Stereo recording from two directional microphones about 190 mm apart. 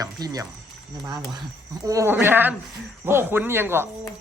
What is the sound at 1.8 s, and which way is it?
Speech, 15° right (ahead or behind).